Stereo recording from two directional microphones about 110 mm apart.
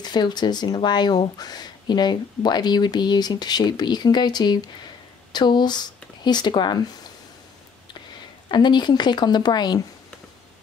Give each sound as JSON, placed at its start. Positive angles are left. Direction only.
{"t": 0.0, "sound": "speech", "side_deg": 40}
{"t": 8.5, "sound": "speech", "side_deg": 45}